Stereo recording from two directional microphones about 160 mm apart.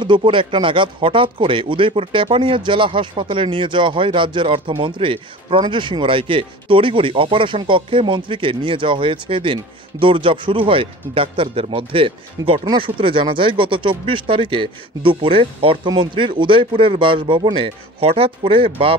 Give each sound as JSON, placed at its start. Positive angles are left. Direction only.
{"t": 0.0, "sound": "speech", "side_deg": -30}